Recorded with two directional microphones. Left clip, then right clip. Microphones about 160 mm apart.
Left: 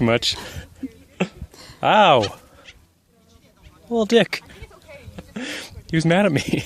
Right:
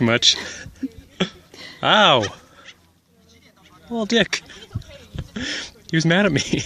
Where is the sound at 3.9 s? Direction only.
35° left (ahead or behind).